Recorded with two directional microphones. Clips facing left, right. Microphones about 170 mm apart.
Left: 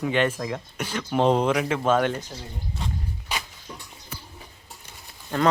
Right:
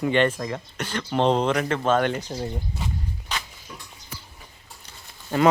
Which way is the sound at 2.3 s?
40° right (ahead or behind).